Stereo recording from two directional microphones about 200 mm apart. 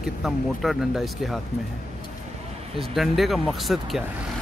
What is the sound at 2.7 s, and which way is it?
Speech, centre (ahead or behind).